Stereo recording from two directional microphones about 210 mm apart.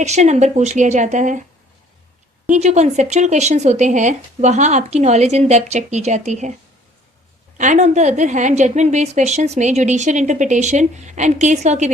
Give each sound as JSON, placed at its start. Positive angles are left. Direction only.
{"t": 0.0, "sound": "a woman's voice", "side_deg": -30}
{"t": 2.5, "sound": "a woman's voice", "side_deg": -35}
{"t": 7.6, "sound": "a woman's voice", "side_deg": -35}